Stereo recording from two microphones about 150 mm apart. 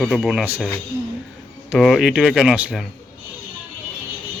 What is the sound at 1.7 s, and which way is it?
Speech, centre (ahead or behind).